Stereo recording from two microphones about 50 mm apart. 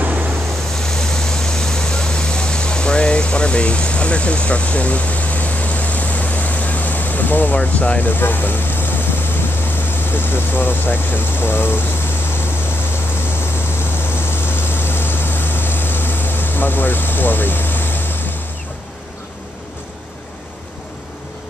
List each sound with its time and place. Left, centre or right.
0.8 s vehicle: centre; by 7.5 s left
7.5 s speech: left
8.0 s speech: left
10.1 s speech: left
14.1 s vehicle: left